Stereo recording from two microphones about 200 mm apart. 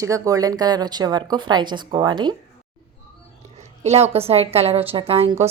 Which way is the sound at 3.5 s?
35° right (ahead or behind).